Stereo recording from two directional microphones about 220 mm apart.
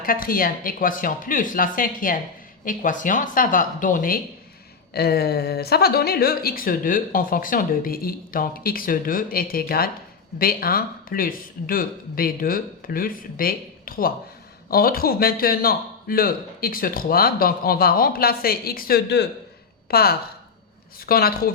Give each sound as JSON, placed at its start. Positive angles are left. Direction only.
{"t": 0.0, "sound": "speech", "side_deg": 40}